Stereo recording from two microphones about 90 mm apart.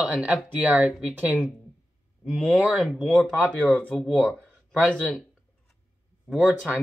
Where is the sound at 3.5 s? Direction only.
15° left (ahead or behind).